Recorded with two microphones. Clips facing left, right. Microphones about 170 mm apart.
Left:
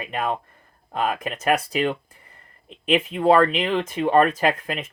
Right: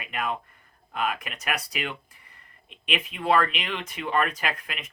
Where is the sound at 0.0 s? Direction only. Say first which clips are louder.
Left 5 dB; 35° left (ahead or behind).